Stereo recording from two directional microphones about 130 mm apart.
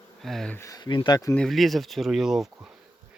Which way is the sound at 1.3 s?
5° left (ahead or behind).